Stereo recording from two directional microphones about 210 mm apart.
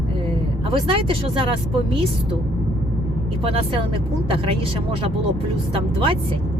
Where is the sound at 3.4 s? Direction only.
25° right (ahead or behind).